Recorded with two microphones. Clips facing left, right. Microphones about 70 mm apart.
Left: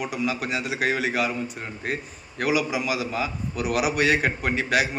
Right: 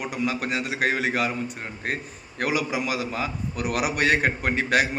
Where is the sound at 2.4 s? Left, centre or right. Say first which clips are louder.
Left 1 dB; right.